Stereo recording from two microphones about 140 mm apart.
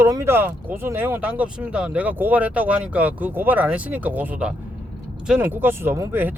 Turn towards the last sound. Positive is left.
turn(degrees=-15)  # may be behind; listen again after turning